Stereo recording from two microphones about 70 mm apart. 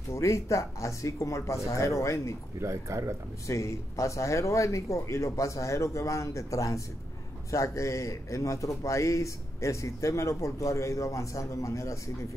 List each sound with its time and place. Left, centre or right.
0.1 s a man's voice: left
2.6 s speech: right
3.4 s a man's voice: left